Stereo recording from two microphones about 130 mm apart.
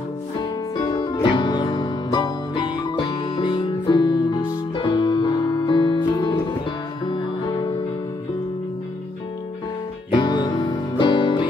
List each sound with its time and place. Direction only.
0.4 s music: 35° left (ahead or behind)
10.1 s music: 35° left (ahead or behind)